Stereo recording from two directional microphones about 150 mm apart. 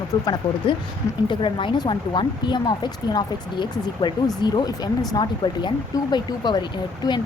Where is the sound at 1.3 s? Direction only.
35° left (ahead or behind).